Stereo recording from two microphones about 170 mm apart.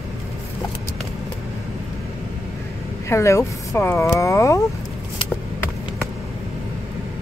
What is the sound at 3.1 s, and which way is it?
Speech, 15° left (ahead or behind).